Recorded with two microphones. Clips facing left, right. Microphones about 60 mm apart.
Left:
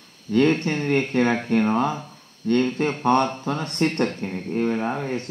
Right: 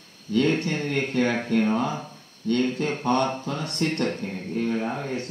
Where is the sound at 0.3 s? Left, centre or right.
Left.